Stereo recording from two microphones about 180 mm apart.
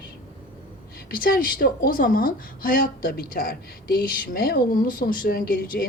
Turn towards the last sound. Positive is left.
turn(degrees=50)  # may be behind; listen again after turning